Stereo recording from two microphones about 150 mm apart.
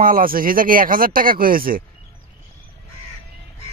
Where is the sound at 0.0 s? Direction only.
70° right (ahead or behind).